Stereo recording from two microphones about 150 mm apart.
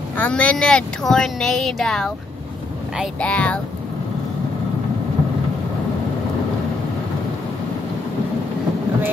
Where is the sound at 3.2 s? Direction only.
10° left (ahead or behind).